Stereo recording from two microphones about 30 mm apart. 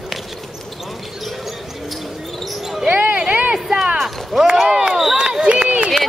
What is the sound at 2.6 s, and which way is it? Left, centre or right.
Basketball bounce, centre.